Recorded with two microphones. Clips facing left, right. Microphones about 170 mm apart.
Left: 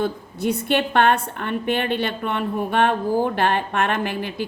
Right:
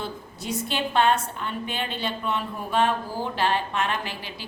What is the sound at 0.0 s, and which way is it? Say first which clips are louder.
A woman's voice: left 10 dB; 55° left (ahead or behind).